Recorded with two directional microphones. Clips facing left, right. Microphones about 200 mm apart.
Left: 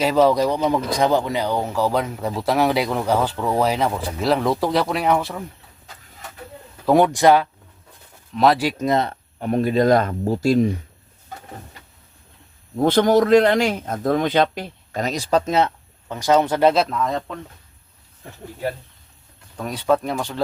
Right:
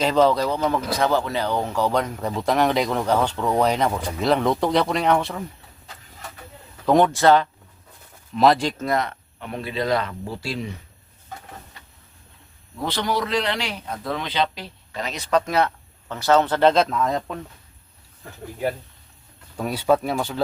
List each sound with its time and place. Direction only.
0.0 s speech: 10° left (ahead or behind)
6.8 s speech: 10° left (ahead or behind)
8.4 s speech: 5° left (ahead or behind)
8.8 s speech: 20° left (ahead or behind)
9.0 s a man's voice: 45° left (ahead or behind)
12.7 s a man's voice: 50° left (ahead or behind)
15.1 s speech: 30° left (ahead or behind); by 17.3 s 5° right (ahead or behind)
19.5 s speech: 5° right (ahead or behind)